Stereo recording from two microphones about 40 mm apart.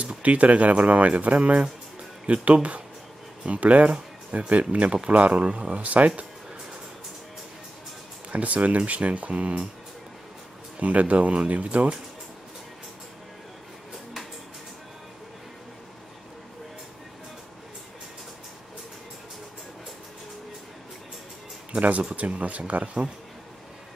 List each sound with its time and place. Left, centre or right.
0.2 s speech: right
8.3 s speech: right
10.8 s speech: right
22.1 s speech: right